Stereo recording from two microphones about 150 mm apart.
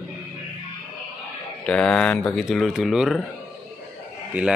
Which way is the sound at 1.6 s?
5° left (ahead or behind).